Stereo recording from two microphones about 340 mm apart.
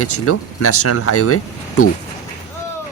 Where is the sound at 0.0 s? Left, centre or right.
Left.